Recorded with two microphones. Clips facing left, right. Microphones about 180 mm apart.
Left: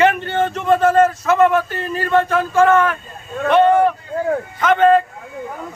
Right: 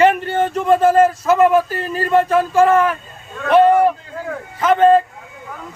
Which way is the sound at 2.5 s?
30° right (ahead or behind).